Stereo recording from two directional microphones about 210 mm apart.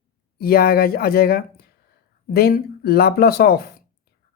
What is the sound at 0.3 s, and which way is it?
Speech, 45° left (ahead or behind).